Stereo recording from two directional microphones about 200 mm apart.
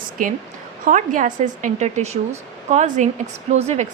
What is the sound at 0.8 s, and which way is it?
A woman's voice, 40° right (ahead or behind).